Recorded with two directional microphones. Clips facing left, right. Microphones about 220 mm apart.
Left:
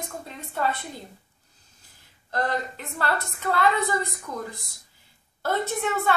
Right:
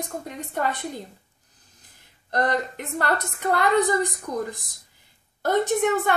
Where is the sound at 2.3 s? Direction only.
20° right (ahead or behind).